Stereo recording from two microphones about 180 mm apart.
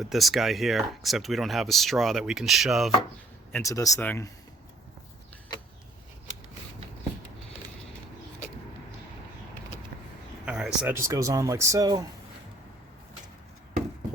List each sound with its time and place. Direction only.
0.0 s speech: centre (ahead or behind)
3.5 s speech: 15° left (ahead or behind)
10.4 s a sound: 5° right (ahead or behind)
10.9 s speech: 15° right (ahead or behind)